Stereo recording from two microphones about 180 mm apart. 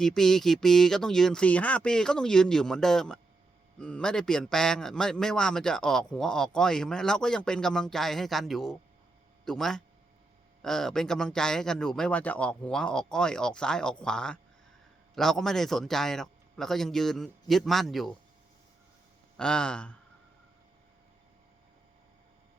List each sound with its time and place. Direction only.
0.0 s a man's voice: centre (ahead or behind)
19.4 s a man's voice: 5° left (ahead or behind)